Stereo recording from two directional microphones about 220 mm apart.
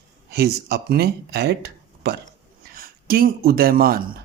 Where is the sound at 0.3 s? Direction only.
45° right (ahead or behind).